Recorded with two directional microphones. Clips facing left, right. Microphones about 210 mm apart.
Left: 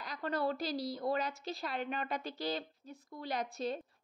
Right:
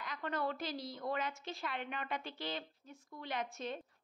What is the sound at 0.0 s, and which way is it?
A woman's voice, 35° left (ahead or behind).